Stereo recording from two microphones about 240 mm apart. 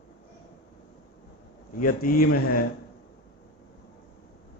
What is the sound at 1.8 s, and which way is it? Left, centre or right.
Speech, left.